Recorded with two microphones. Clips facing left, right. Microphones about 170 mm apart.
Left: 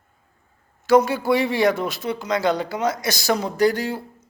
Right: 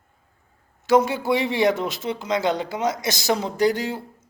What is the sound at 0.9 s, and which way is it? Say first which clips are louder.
A man's voice: left 2 dB; 20° right (ahead or behind).